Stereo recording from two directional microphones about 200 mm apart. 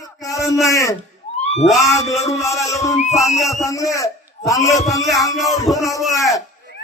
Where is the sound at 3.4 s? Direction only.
15° left (ahead or behind).